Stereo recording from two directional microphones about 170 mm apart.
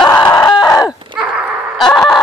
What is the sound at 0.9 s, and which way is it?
Dog, 5° right (ahead or behind).